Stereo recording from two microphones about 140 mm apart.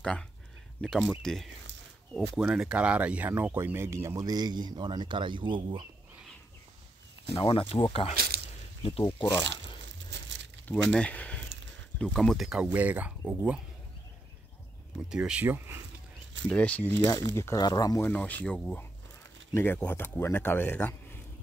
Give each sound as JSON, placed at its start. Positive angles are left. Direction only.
{"t": 0.7, "sound": "speech", "side_deg": 5}
{"t": 7.3, "sound": "speech", "side_deg": 40}
{"t": 10.7, "sound": "speech", "side_deg": 10}
{"t": 15.0, "sound": "speech", "side_deg": -5}
{"t": 16.4, "sound": "speech", "side_deg": 10}
{"t": 17.0, "sound": "speech", "side_deg": 20}
{"t": 18.0, "sound": "speech", "side_deg": 10}